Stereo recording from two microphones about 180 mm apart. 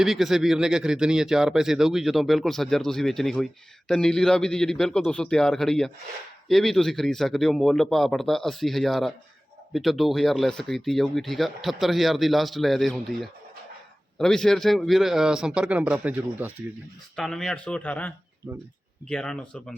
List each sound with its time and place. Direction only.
0.0 s speech: centre (ahead or behind)
17.2 s speech: centre (ahead or behind)
18.4 s speech: 10° right (ahead or behind)
19.0 s speech: 5° left (ahead or behind)